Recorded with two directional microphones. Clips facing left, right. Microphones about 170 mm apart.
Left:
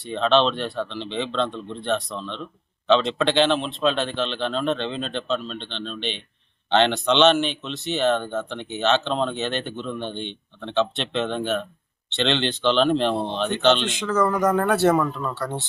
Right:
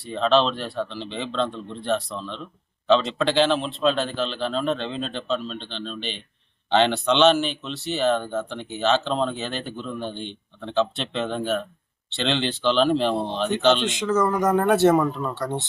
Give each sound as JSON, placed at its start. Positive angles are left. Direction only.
{"t": 0.0, "sound": "a man's voice", "side_deg": 0}
{"t": 14.6, "sound": "speech", "side_deg": -20}